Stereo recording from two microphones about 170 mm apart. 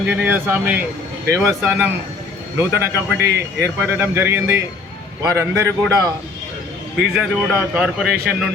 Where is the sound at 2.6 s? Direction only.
15° right (ahead or behind).